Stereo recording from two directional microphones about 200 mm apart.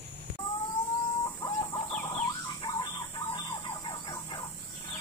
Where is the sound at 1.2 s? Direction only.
20° left (ahead or behind).